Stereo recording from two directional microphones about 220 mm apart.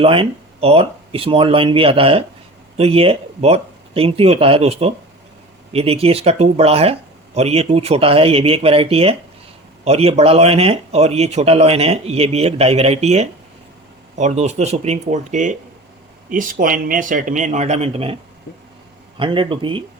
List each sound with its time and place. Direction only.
0.0 s speech: 25° right (ahead or behind)